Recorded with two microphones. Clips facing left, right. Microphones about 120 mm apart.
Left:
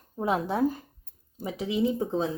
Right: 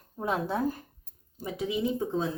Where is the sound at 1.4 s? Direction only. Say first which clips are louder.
Left 3 dB; 25° left (ahead or behind).